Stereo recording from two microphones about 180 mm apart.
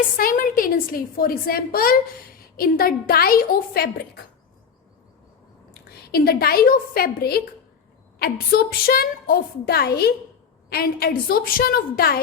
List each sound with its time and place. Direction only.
0.2 s a woman's voice: 50° left (ahead or behind)
6.1 s a woman's voice: 60° left (ahead or behind)